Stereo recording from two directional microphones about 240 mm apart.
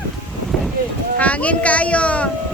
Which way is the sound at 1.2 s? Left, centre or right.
Centre.